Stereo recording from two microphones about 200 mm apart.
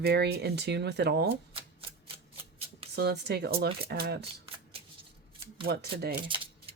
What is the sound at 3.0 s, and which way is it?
Speech, 55° right (ahead or behind).